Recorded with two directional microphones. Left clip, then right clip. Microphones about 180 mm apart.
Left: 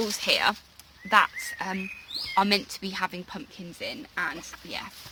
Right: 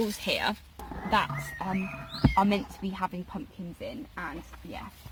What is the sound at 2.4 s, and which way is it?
Speech, 5° right (ahead or behind).